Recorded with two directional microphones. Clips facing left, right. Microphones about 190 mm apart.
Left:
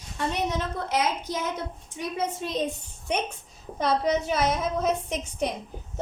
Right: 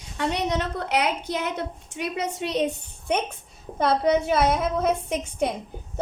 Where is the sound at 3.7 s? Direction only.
55° right (ahead or behind).